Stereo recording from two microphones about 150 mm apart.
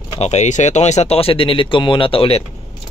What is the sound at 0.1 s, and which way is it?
Speech, 45° left (ahead or behind).